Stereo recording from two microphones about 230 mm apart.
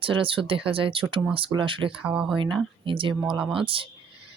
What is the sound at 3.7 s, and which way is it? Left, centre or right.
Speech, right.